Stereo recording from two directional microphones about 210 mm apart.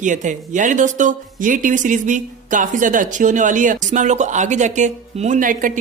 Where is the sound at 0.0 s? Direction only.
35° right (ahead or behind).